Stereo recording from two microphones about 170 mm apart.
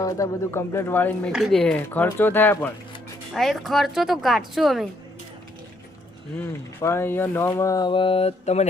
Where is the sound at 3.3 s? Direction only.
Centre (ahead or behind).